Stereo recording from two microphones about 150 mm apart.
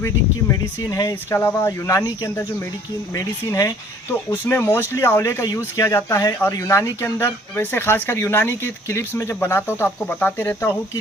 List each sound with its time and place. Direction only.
0.0 s speech: 20° left (ahead or behind)